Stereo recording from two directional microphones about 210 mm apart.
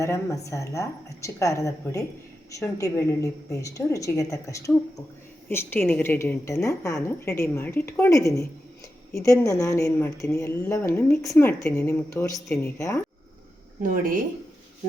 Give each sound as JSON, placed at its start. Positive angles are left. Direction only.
{"t": 0.0, "sound": "a woman's voice", "side_deg": 15}
{"t": 13.8, "sound": "speech", "side_deg": -40}